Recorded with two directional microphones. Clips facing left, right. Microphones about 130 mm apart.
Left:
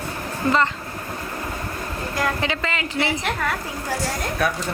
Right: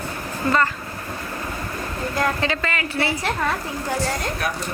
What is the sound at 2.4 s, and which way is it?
Speech, 15° left (ahead or behind).